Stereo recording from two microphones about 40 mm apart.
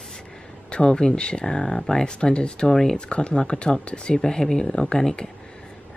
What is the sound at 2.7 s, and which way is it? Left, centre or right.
Speech, centre.